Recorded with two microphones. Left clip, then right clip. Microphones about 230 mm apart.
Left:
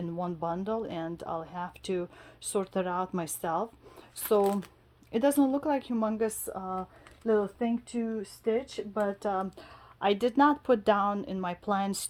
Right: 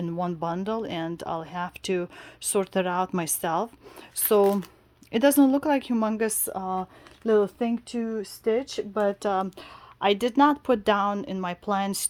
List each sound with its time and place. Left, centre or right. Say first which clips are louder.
0.0 s speech: right 4 dB; right